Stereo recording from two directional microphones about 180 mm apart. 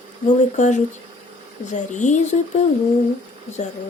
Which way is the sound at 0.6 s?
40° left (ahead or behind).